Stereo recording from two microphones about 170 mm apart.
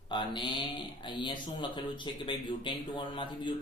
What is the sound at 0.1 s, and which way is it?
Speech, 30° left (ahead or behind).